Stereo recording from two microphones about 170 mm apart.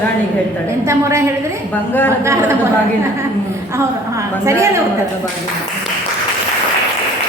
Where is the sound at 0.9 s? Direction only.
15° right (ahead or behind).